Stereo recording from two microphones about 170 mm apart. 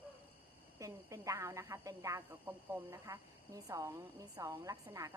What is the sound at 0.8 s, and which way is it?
A woman's voice, 20° right (ahead or behind).